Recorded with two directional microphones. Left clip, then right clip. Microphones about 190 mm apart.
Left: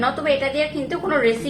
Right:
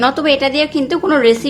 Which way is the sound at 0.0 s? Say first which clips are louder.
Right 7 dB; 55° right (ahead or behind).